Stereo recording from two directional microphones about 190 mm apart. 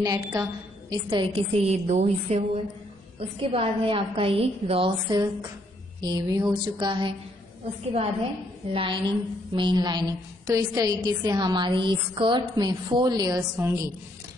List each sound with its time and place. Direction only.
0.0 s a woman's voice: 20° right (ahead or behind)
8.7 s a woman's voice: 25° right (ahead or behind)